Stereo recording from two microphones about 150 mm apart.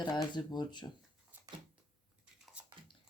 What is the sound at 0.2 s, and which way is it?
Speech, 30° left (ahead or behind).